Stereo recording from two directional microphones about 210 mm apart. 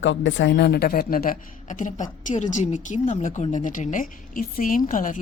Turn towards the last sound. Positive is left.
turn(degrees=40)  # may be behind; listen again after turning